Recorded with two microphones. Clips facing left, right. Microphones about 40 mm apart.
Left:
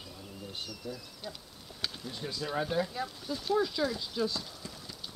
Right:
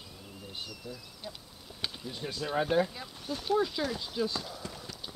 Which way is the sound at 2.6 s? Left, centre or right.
Right.